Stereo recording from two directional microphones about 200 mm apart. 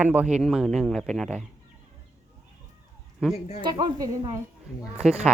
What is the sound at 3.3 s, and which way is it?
Speech, 35° left (ahead or behind).